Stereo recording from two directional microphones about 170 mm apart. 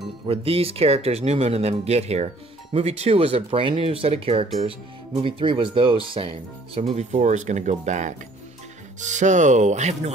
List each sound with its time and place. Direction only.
0.3 s speech: 35° right (ahead or behind)